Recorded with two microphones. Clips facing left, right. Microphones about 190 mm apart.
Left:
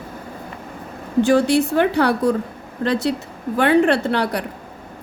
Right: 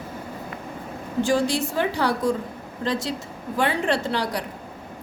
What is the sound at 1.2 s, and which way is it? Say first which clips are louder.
A woman's voice: left 6 dB; 60° left (ahead or behind).